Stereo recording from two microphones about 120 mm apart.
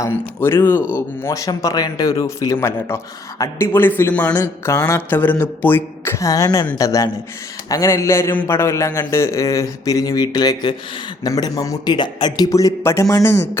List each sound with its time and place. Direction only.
0.0 s speech: 20° left (ahead or behind)